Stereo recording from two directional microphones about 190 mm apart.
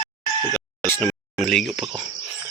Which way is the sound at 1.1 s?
Centre (ahead or behind).